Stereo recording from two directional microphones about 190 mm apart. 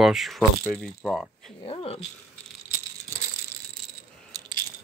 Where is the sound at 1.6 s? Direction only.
30° left (ahead or behind).